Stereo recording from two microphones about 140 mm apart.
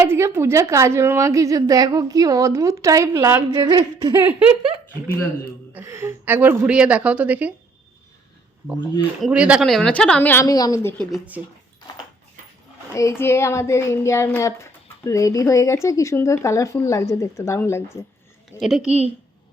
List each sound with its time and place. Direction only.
0.0 s a woman's voice: 20° right (ahead or behind)
3.6 s speech: 35° right (ahead or behind)
4.1 s a woman's voice: 15° right (ahead or behind)
5.7 s a woman's voice: 20° right (ahead or behind)
9.2 s speech: 5° right (ahead or behind); by 10.4 s 15° left (ahead or behind)
10.4 s speech: 25° left (ahead or behind)
10.9 s speech: 5° left (ahead or behind)
12.9 s speech: 20° left (ahead or behind)
18.6 s speech: centre (ahead or behind)
18.9 s speech: 50° right (ahead or behind)